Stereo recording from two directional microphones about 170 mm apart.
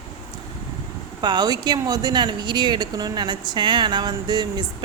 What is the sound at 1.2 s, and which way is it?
Speech, 25° right (ahead or behind).